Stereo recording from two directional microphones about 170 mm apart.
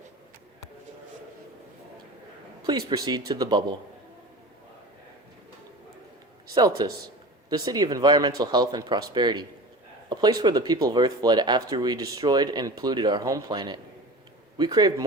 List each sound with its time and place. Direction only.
2.6 s speech: 25° right (ahead or behind)
6.5 s speech: 25° right (ahead or behind)